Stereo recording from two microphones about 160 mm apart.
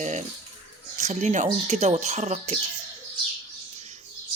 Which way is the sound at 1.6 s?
40° right (ahead or behind).